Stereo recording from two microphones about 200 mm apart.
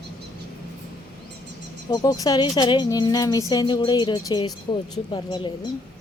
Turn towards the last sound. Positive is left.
turn(degrees=25)  # may be behind; listen again after turning